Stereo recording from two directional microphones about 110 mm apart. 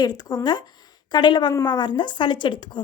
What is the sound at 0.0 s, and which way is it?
A woman's voice, 35° left (ahead or behind).